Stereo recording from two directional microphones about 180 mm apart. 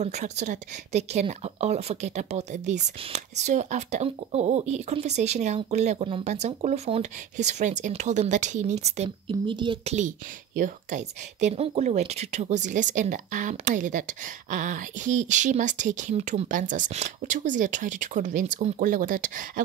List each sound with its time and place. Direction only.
0.0 s speech: 40° right (ahead or behind)
9.9 s a woman's voice: 45° right (ahead or behind)